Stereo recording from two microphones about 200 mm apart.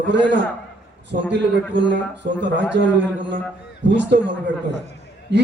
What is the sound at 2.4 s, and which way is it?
Speech, 60° right (ahead or behind).